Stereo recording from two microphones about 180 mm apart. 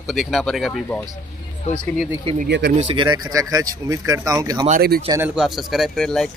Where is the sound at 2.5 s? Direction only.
70° right (ahead or behind).